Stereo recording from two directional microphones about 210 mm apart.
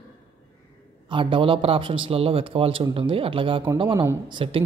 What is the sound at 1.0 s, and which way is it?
A man's voice, 25° right (ahead or behind).